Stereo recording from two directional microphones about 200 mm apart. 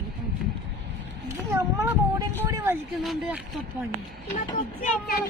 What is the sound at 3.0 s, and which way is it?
Speech, centre (ahead or behind).